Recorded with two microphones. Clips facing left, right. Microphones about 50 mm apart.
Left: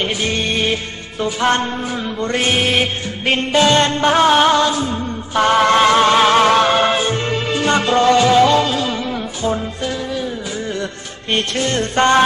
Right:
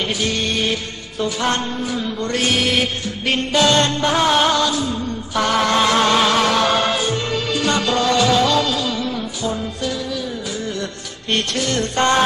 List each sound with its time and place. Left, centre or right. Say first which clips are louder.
0.0 s music: left 2 dB; left
11.5 s music: left 3 dB; left